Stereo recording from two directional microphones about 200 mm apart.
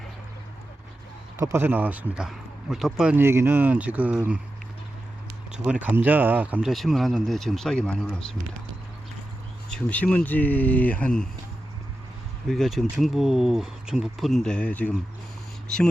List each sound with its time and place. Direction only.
1.4 s speech: 15° right (ahead or behind)
5.5 s speech: 5° right (ahead or behind)
9.6 s speech: 5° left (ahead or behind)
12.5 s speech: centre (ahead or behind)